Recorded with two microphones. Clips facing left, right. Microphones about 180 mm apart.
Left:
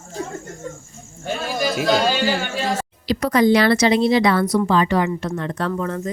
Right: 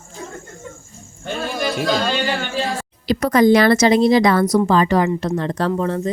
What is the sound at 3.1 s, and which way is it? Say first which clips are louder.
A woman's voice: right 3 dB; 50° right (ahead or behind).